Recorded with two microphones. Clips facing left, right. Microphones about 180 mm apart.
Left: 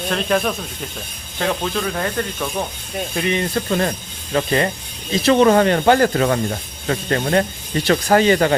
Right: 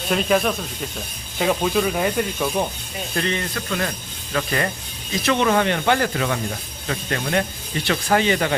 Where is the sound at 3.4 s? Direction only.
30° left (ahead or behind).